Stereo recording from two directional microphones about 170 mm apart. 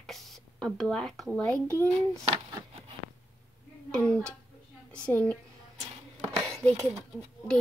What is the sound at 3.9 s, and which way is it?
Speech, 5° left (ahead or behind).